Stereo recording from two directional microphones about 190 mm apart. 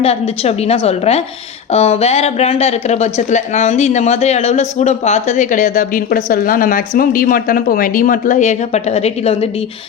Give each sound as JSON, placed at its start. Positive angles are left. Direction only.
{"t": 0.0, "sound": "a woman's voice", "side_deg": 35}